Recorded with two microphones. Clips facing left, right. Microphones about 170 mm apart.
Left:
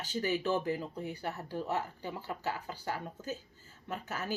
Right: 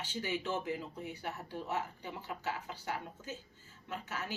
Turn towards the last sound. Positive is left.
turn(degrees=40)  # may be behind; listen again after turning